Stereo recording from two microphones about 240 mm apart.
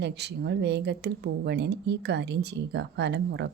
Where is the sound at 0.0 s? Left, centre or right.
Right.